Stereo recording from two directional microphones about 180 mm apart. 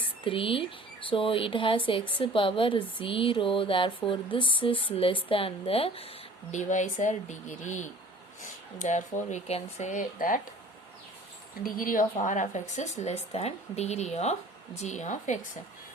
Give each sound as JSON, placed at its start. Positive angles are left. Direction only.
{"t": 0.3, "sound": "speech", "side_deg": 30}
{"t": 11.6, "sound": "speech", "side_deg": 50}